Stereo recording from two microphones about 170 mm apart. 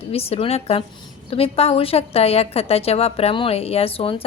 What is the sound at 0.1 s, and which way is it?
A woman's voice, 35° left (ahead or behind).